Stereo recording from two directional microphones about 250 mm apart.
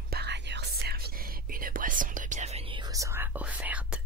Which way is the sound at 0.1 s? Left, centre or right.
Right.